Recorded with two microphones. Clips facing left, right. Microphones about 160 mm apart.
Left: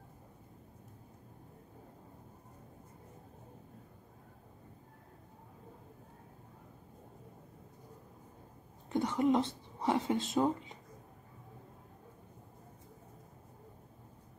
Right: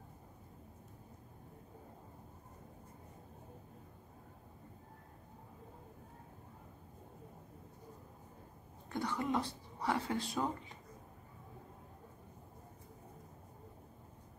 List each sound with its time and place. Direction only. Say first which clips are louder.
8.8 s speech: left 7 dB; 20° left (ahead or behind)